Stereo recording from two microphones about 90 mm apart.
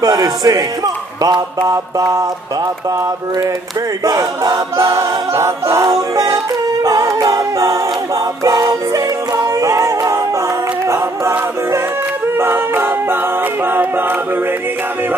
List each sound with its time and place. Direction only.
0.0 s mantra: 50° right (ahead or behind)
4.0 s mantra: 45° right (ahead or behind)
4.7 s a capella: 30° right (ahead or behind)
5.8 s music: 45° right (ahead or behind)
7.2 s a capella: 35° right (ahead or behind)
8.5 s music: 45° right (ahead or behind)
12.4 s a capella: 25° right (ahead or behind)